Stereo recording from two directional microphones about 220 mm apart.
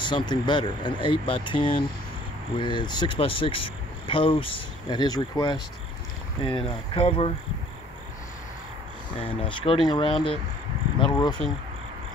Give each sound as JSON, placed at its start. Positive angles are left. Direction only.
{"t": 0.0, "sound": "speech", "side_deg": 20}
{"t": 9.2, "sound": "speech", "side_deg": 25}